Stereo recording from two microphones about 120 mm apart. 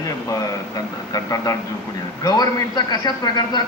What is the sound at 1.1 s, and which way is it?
A man's voice, 30° left (ahead or behind).